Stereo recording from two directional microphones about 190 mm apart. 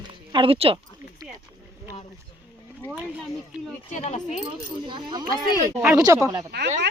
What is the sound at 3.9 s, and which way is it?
Speech, 35° left (ahead or behind).